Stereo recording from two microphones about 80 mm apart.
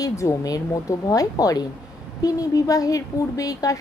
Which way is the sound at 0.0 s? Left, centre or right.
Left.